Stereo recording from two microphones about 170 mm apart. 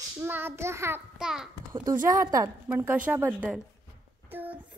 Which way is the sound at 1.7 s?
20° right (ahead or behind).